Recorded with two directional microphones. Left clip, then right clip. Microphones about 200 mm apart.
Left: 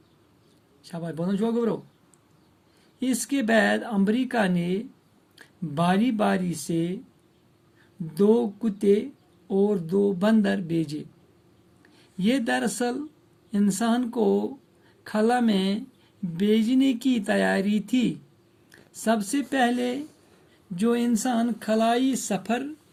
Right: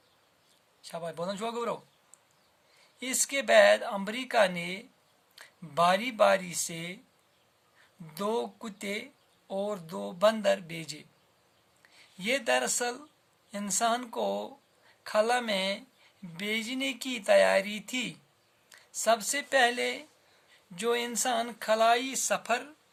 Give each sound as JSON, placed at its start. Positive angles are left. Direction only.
{"t": 0.8, "sound": "speech", "side_deg": -45}
{"t": 3.0, "sound": "speech", "side_deg": -45}
{"t": 8.2, "sound": "speech", "side_deg": -50}
{"t": 12.2, "sound": "speech", "side_deg": -45}